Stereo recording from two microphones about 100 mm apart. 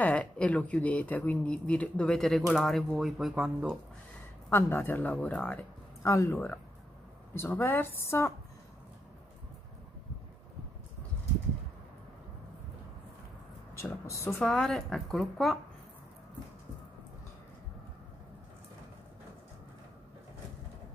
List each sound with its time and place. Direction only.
0.0 s speech: 15° left (ahead or behind); by 3.5 s 5° right (ahead or behind)
4.5 s a woman's voice: 20° left (ahead or behind)
5.3 s a woman's voice: 5° left (ahead or behind)
6.0 s speech: 30° left (ahead or behind)
6.3 s a woman's voice: 15° left (ahead or behind)
14.4 s a woman's voice: 5° left (ahead or behind)